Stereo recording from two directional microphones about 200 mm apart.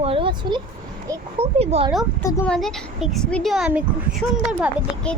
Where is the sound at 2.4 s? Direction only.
Centre (ahead or behind).